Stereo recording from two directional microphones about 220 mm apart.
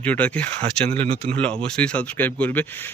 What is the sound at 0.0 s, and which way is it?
Speech, 5° left (ahead or behind).